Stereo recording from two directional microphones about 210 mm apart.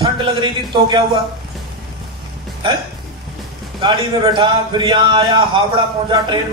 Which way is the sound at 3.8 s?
25° right (ahead or behind).